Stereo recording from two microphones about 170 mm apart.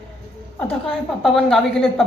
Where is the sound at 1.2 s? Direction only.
Centre (ahead or behind).